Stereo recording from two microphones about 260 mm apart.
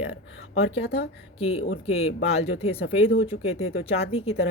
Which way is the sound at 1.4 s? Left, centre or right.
Left.